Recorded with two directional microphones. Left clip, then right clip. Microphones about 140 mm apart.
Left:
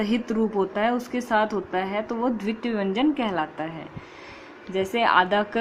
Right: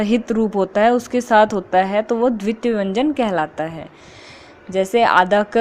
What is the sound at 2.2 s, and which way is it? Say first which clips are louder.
A woman's voice: right 8 dB; 35° right (ahead or behind).